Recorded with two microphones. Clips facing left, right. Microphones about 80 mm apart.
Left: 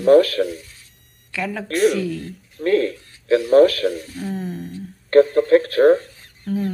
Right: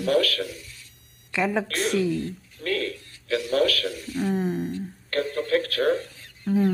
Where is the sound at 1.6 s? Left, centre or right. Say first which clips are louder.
Left 8 dB; left.